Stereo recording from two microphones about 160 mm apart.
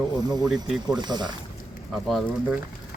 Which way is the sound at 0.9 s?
25° right (ahead or behind).